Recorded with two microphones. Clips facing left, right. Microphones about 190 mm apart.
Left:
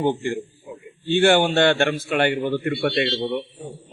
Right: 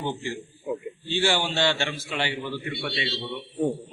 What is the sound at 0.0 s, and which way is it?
A man's voice, 50° left (ahead or behind).